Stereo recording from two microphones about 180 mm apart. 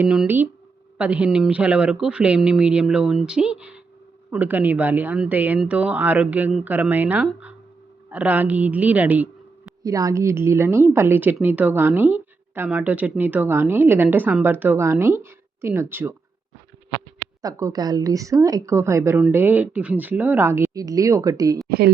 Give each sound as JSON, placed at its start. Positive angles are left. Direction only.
{"t": 0.0, "sound": "a woman's voice", "side_deg": -5}
{"t": 9.8, "sound": "a woman's voice", "side_deg": -20}
{"t": 17.4, "sound": "a woman's voice", "side_deg": -20}